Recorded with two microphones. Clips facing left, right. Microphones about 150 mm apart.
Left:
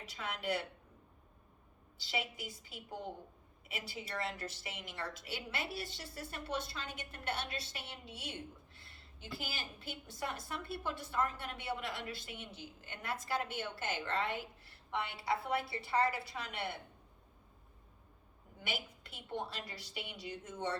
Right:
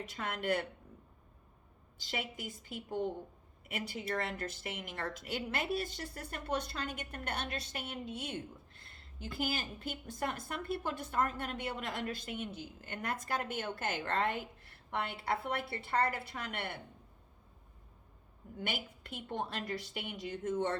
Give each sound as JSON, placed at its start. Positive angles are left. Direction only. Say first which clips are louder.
{"t": 0.1, "sound": "a woman's voice", "louder": "right 3 dB", "side_deg": -50}
{"t": 2.0, "sound": "a woman's voice", "louder": "even", "side_deg": -50}
{"t": 18.6, "sound": "a woman's voice", "louder": "right 3 dB", "side_deg": -50}